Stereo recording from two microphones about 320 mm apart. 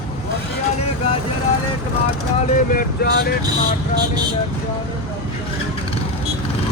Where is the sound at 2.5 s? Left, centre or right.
Left.